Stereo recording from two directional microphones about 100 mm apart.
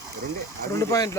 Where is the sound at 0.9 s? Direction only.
35° left (ahead or behind).